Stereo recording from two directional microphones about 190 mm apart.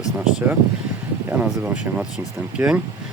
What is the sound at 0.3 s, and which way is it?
Speech, 5° right (ahead or behind).